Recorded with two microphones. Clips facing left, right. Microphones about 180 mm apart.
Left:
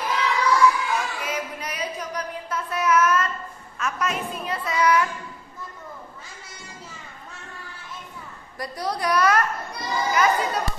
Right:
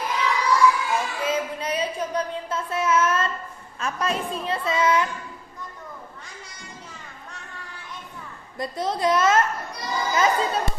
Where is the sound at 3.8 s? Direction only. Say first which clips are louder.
Right 1 dB; 30° right (ahead or behind).